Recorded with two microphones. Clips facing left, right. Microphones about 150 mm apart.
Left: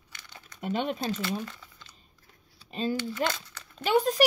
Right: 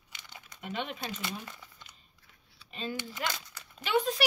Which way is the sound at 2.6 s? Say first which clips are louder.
Left 8 dB; 40° left (ahead or behind).